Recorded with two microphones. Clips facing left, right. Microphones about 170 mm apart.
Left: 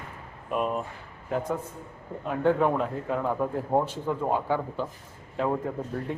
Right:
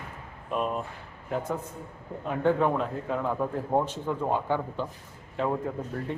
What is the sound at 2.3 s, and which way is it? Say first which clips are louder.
A man's voice: left 1 dB; 5° left (ahead or behind).